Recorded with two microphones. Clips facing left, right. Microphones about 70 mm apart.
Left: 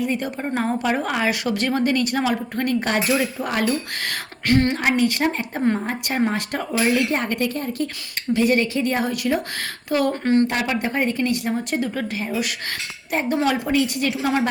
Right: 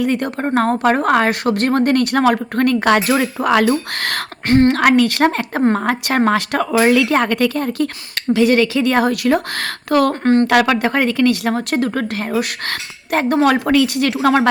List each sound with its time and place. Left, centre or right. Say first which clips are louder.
0.0 s speech: right 6 dB; right
4.4 s a woman's voice: right 6 dB; right
4.7 s speech: right 7 dB; right
10.4 s speech: right 8 dB; right